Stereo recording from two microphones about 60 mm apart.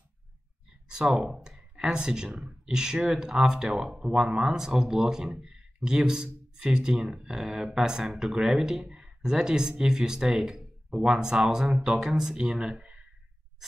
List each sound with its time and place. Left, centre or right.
0.8 s speech: centre